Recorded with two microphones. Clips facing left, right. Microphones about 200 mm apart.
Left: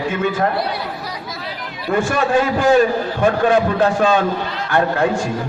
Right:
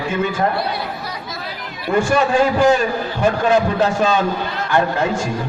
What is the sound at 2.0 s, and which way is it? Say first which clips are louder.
A man's voice: right 2 dB; 55° left (ahead or behind).